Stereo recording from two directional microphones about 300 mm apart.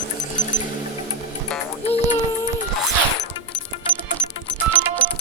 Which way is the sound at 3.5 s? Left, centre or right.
Centre.